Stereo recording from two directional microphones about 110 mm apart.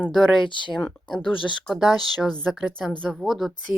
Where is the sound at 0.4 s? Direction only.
50° left (ahead or behind).